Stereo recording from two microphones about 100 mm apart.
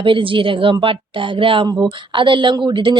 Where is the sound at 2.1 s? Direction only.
55° right (ahead or behind).